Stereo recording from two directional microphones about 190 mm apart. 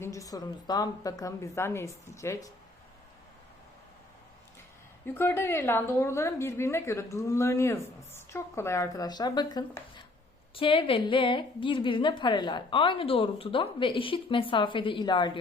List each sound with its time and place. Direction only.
0.0 s a woman's voice: 15° left (ahead or behind)
5.0 s a woman's voice: 10° left (ahead or behind)